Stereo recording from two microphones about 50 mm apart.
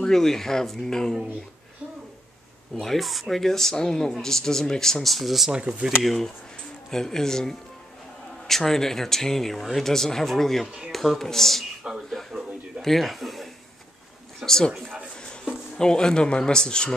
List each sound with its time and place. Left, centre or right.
0.0 s speech: centre
2.8 s speech: centre
5.5 s speech: right
5.9 s speech: centre
12.1 s a sound: centre
15.2 s speech: centre